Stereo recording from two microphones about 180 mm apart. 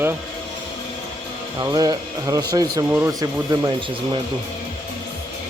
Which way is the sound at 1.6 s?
20° right (ahead or behind).